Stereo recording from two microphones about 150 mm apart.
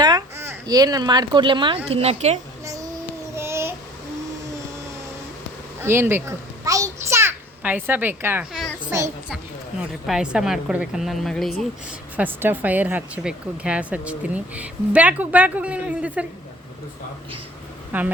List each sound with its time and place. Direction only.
0.0 s a child's voice: 25° right (ahead or behind)
1.9 s speech: 45° right (ahead or behind)
3.3 s child singing: 15° right (ahead or behind)
5.8 s a sound: 15° right (ahead or behind)
8.9 s a child's voice: 20° right (ahead or behind)
10.1 s a woman's voice: 5° right (ahead or behind)
12.1 s speech: 10° right (ahead or behind)
17.9 s speech: 10° right (ahead or behind)